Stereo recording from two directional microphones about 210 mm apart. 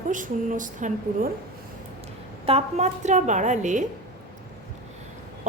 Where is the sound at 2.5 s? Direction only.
30° right (ahead or behind).